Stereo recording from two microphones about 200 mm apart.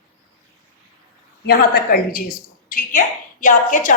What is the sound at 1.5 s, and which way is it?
A woman's voice, 50° left (ahead or behind).